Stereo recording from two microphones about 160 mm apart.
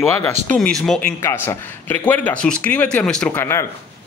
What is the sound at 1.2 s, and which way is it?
Speech, 15° left (ahead or behind).